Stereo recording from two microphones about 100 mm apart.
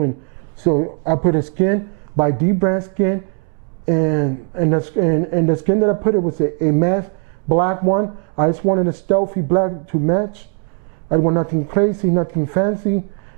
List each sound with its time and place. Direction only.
0.7 s speech: 15° right (ahead or behind)